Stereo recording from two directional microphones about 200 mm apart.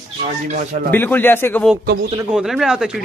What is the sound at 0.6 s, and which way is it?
Speech, 45° right (ahead or behind).